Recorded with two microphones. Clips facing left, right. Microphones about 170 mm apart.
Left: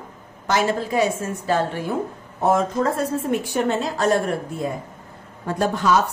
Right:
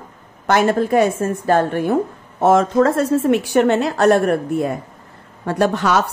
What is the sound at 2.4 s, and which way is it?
A woman's voice, 80° right.